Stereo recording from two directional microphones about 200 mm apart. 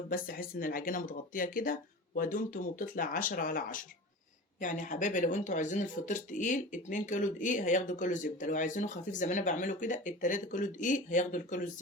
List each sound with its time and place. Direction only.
0.1 s speech: 45° left (ahead or behind)